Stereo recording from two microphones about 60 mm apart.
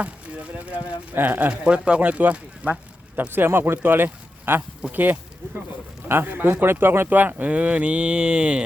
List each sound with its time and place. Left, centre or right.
0.0 s speech: right
3.2 s speech: right; by 8.6 s centre